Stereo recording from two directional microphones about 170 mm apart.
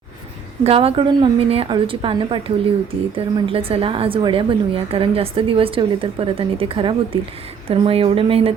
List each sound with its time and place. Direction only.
0.6 s a woman's voice: 35° right (ahead or behind)